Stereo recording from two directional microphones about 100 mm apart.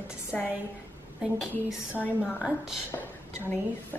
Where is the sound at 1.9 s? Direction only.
15° left (ahead or behind).